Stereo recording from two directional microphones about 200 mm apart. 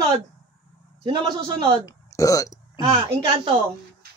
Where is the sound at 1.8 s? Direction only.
15° left (ahead or behind).